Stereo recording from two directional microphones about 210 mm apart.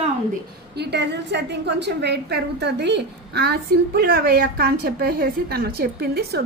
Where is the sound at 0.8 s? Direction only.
55° right (ahead or behind).